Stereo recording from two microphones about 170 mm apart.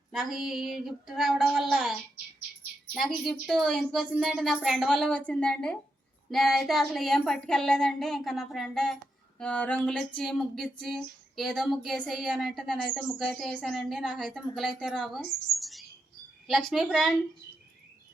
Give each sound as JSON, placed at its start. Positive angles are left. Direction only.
{"t": 0.1, "sound": "a woman's voice", "side_deg": 0}
{"t": 9.4, "sound": "a sound", "side_deg": 5}
{"t": 10.2, "sound": "a woman's voice", "side_deg": 0}